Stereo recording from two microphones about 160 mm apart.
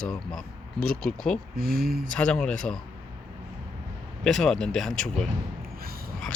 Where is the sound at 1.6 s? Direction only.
65° right (ahead or behind).